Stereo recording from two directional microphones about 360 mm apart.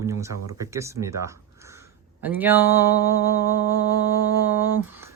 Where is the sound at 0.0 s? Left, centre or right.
Centre.